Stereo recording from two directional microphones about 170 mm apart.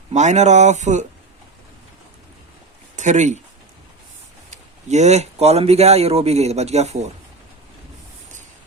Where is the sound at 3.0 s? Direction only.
45° right (ahead or behind).